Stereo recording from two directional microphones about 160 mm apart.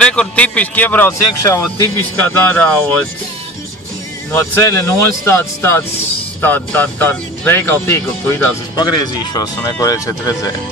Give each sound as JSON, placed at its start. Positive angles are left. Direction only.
{"t": 0.0, "sound": "speech", "side_deg": 5}
{"t": 4.3, "sound": "speech", "side_deg": 15}